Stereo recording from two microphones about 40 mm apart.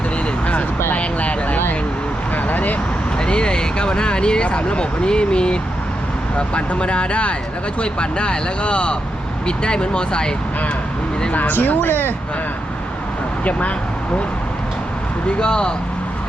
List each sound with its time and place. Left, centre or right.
0.9 s a sound: left
2.3 s vehicle: left
3.2 s speech: left
11.3 s speech: left
13.4 s speech: left
15.4 s speech: left